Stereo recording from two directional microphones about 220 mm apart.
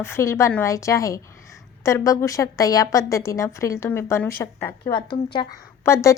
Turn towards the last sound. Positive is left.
turn(degrees=15)  # may be behind; listen again after turning